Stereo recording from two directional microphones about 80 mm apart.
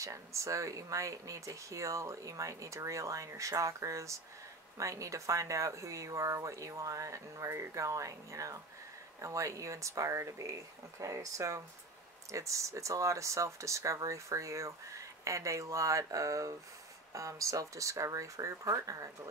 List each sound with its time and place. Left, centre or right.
0.0 s speech: right